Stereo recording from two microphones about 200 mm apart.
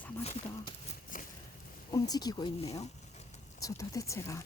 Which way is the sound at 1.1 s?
40° left (ahead or behind).